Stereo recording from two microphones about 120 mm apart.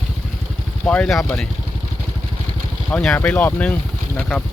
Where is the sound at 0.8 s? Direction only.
10° left (ahead or behind).